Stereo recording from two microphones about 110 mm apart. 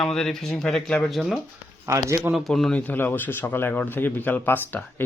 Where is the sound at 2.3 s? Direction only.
Centre (ahead or behind).